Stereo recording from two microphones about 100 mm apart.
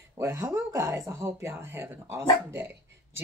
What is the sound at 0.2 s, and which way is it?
Speech, 25° right (ahead or behind).